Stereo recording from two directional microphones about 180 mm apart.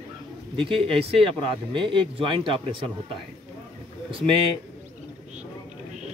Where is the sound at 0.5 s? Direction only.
30° right (ahead or behind).